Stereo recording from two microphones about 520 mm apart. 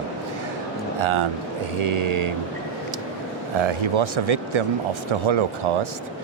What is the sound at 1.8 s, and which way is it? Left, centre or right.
Mantra, right.